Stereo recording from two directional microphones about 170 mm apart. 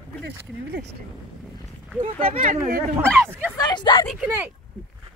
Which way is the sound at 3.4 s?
20° left (ahead or behind).